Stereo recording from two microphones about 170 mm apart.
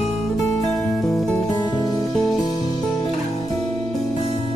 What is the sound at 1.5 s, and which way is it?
Music, 20° left (ahead or behind).